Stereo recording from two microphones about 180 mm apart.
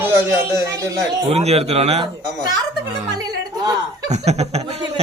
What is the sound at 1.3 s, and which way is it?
Speech, 35° right (ahead or behind).